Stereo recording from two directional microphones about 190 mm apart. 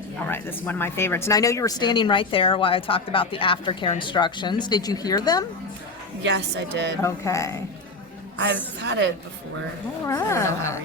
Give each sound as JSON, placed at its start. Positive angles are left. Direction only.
{"t": 0.3, "sound": "speech", "side_deg": 10}
{"t": 6.2, "sound": "a woman's voice", "side_deg": -65}
{"t": 7.0, "sound": "speech", "side_deg": 15}
{"t": 8.8, "sound": "a woman's voice", "side_deg": -65}
{"t": 10.1, "sound": "speech", "side_deg": 15}